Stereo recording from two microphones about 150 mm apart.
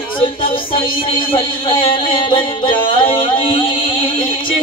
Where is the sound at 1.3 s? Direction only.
35° left (ahead or behind).